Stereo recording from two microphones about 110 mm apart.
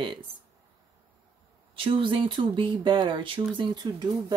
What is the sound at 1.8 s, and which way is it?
Speech, 50° right (ahead or behind).